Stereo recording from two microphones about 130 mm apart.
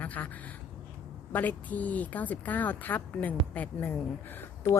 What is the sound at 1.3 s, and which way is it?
A woman's voice, 10° left (ahead or behind).